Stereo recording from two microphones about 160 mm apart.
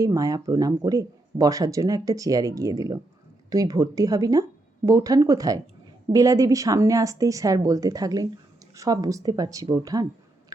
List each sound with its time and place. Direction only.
0.0 s speech: 20° right (ahead or behind)